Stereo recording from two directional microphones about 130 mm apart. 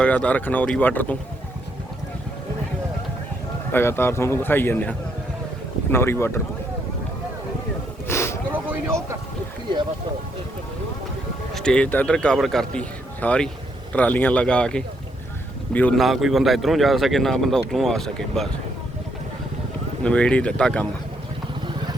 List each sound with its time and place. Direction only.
0.0 s speech: 10° left (ahead or behind)
3.7 s speech: 15° left (ahead or behind)
8.0 s a sound: 20° left (ahead or behind)
11.5 s speech: 5° left (ahead or behind)
16.0 s speech: centre (ahead or behind)
20.1 s speech: 10° left (ahead or behind)